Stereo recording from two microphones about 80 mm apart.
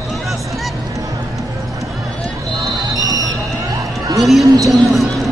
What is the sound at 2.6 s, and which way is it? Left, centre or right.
Basketball bounce, right.